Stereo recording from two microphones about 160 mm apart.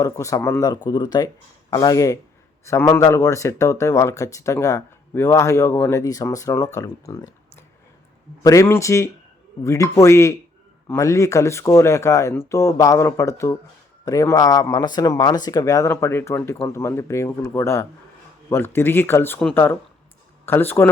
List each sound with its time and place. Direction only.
0.0 s speech: 20° left (ahead or behind)
8.4 s speech: 15° left (ahead or behind)